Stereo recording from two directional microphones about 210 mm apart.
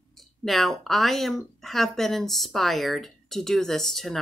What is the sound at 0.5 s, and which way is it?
Speech, centre (ahead or behind).